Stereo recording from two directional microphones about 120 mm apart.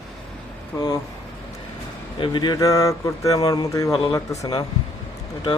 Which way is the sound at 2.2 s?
40° left (ahead or behind).